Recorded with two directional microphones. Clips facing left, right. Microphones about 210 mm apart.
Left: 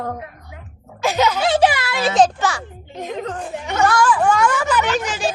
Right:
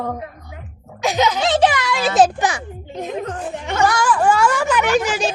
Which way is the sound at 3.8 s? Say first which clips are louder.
Left 2 dB; 20° right (ahead or behind).